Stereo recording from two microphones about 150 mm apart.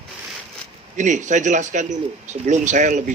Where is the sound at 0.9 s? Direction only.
55° right (ahead or behind).